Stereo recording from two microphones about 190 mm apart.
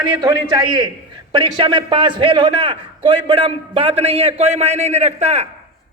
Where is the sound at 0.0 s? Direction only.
20° right (ahead or behind).